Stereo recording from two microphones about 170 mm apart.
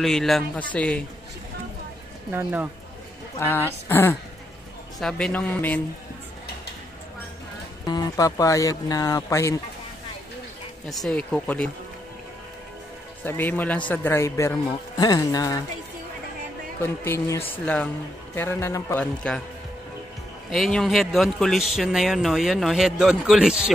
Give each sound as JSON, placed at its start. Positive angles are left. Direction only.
{"t": 0.0, "sound": "speech", "side_deg": 0}
{"t": 2.3, "sound": "speech", "side_deg": -10}
{"t": 3.3, "sound": "a man's voice", "side_deg": 15}
{"t": 7.8, "sound": "speech", "side_deg": 25}
{"t": 11.1, "sound": "a man's voice", "side_deg": 5}
{"t": 13.2, "sound": "a man's voice", "side_deg": 10}
{"t": 16.8, "sound": "a man's voice", "side_deg": 15}
{"t": 19.2, "sound": "speech", "side_deg": 5}
{"t": 20.5, "sound": "speech", "side_deg": 0}